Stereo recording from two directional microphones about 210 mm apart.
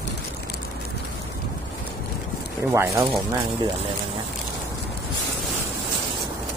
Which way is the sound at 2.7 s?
10° right (ahead or behind).